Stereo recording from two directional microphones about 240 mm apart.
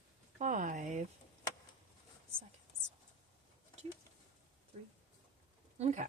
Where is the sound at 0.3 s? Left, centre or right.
Right.